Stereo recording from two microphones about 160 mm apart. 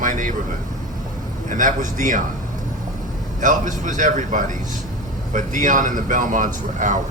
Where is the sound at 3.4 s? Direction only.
55° right (ahead or behind).